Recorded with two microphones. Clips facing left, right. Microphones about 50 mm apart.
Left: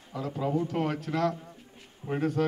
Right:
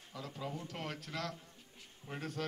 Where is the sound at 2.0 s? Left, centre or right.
Left.